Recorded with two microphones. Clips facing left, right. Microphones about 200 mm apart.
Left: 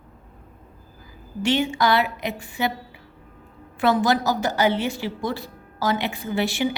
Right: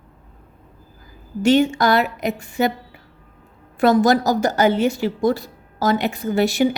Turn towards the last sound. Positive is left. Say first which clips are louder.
# right 6 dB
turn(degrees=-45)  # may be behind; listen again after turning